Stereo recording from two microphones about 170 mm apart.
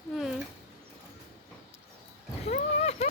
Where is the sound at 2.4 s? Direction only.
35° left (ahead or behind).